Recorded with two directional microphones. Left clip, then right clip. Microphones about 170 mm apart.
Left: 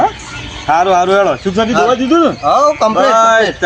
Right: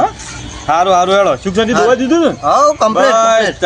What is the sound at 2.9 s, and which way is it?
Speech, 15° right (ahead or behind).